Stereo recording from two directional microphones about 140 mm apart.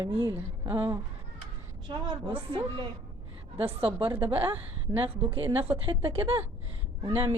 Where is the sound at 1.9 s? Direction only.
35° right (ahead or behind).